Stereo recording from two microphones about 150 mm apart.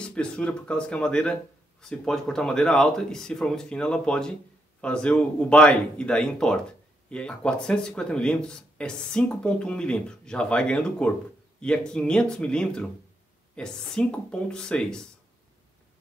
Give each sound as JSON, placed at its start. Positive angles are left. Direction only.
{"t": 0.0, "sound": "speech", "side_deg": 5}